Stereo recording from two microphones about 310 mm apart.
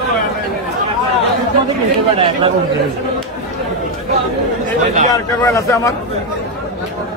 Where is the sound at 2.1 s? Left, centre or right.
Centre.